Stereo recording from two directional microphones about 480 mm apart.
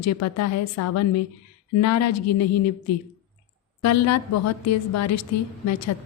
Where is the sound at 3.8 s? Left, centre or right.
Left.